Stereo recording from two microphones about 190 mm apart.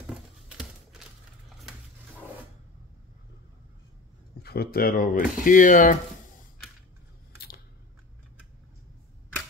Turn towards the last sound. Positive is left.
turn(degrees=55)  # may be behind; listen again after turning